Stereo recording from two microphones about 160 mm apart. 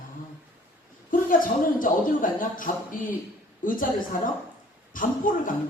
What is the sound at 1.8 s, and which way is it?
A man's voice, 55° left (ahead or behind).